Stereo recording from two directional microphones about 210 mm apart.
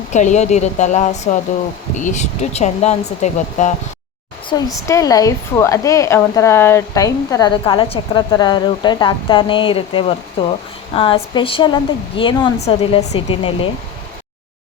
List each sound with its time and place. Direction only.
0.1 s speech: 35° left (ahead or behind)
4.4 s a woman's voice: 15° left (ahead or behind)